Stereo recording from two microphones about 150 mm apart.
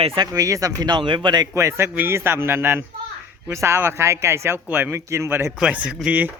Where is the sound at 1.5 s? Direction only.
20° right (ahead or behind).